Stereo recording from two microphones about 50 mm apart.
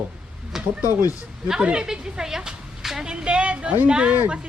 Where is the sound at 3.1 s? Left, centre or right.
Right.